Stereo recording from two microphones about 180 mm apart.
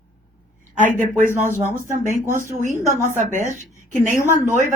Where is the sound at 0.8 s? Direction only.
45° right (ahead or behind).